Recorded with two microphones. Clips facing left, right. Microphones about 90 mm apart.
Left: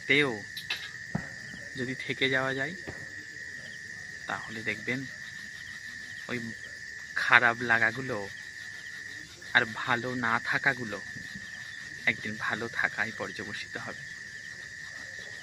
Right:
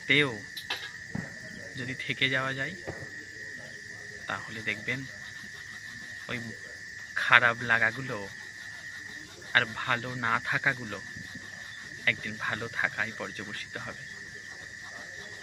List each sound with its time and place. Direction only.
0.1 s speech: 10° left (ahead or behind)
1.8 s speech: 20° left (ahead or behind)
4.3 s speech: 5° left (ahead or behind)
6.3 s speech: 15° left (ahead or behind)
9.5 s speech: 15° left (ahead or behind)
12.0 s speech: 15° left (ahead or behind)